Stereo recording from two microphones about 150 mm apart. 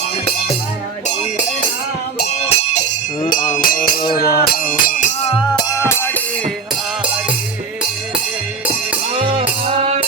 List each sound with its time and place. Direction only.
2.4 s music: 45° left (ahead or behind)
3.5 s music: 70° left (ahead or behind)
4.1 s music: 90° left; by 5.0 s 65° left (ahead or behind)
5.5 s music: 20° left (ahead or behind)
9.1 s music: 40° right (ahead or behind)